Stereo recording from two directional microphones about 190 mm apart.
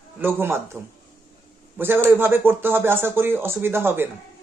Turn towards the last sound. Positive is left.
turn(degrees=-10)  # may be behind; listen again after turning